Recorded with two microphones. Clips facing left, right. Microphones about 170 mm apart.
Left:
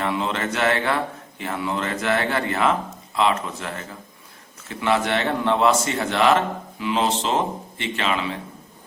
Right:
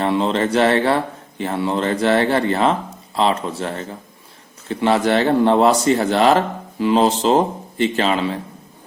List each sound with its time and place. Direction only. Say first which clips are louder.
0.0 s speech: right 6 dB; 30° right (ahead or behind)